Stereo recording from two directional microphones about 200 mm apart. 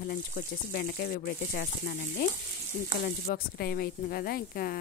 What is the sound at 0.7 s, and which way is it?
Speech, 50° left (ahead or behind).